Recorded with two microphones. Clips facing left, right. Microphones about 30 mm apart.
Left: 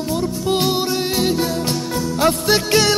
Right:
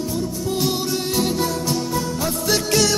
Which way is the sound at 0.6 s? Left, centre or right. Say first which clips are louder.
Left 3 dB; left.